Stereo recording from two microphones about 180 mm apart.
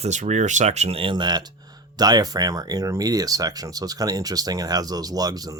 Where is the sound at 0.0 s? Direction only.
40° right (ahead or behind).